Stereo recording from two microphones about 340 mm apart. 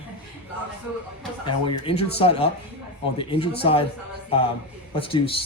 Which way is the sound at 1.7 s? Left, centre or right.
Centre.